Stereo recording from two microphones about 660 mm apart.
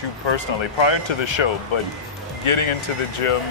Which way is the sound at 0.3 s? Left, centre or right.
Left.